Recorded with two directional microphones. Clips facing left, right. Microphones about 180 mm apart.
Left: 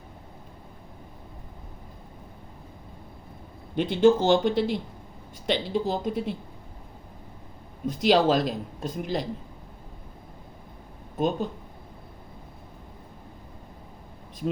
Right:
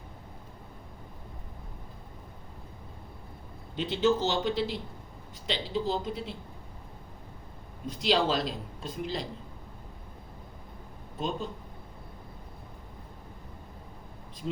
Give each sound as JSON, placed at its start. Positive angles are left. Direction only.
{"t": 3.8, "sound": "speech", "side_deg": 50}
{"t": 7.9, "sound": "speech", "side_deg": 50}
{"t": 11.2, "sound": "speech", "side_deg": 50}